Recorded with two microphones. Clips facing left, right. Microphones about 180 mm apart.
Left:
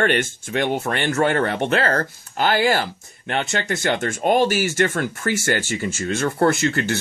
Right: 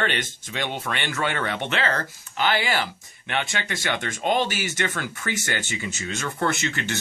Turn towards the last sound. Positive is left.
turn(degrees=45)  # may be behind; listen again after turning